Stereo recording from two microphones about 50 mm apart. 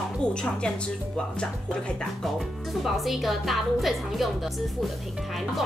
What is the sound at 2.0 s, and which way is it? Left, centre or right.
Speech, centre.